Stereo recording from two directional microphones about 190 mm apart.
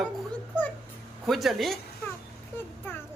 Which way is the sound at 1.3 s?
Centre (ahead or behind).